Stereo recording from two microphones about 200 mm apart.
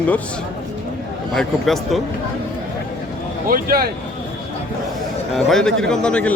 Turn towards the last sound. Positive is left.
turn(degrees=5)  # may be behind; listen again after turning